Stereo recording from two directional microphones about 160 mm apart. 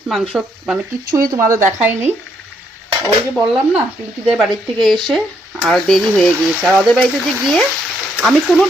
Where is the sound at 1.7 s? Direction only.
15° right (ahead or behind).